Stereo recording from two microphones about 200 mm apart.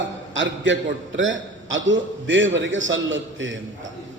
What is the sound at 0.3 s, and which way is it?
A man's voice, 70° right (ahead or behind).